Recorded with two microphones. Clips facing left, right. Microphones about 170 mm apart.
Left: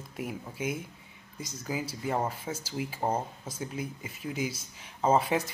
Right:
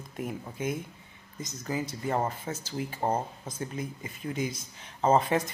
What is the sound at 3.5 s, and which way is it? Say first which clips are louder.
Speech: even; 5° left (ahead or behind).